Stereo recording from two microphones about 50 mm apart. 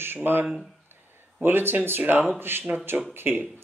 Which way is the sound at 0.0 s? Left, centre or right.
Right.